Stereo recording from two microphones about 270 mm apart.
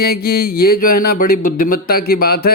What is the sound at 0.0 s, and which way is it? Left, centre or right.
A man's voice, left.